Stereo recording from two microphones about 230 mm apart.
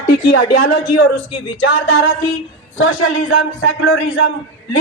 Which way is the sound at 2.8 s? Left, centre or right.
Left.